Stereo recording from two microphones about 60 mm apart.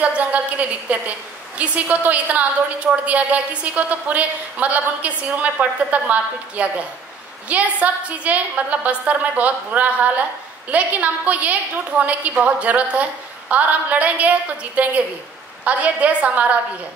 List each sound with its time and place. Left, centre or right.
0.0 s a woman's voice: right